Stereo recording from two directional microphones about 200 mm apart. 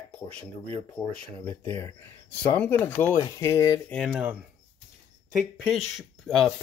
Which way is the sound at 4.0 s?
5° right (ahead or behind).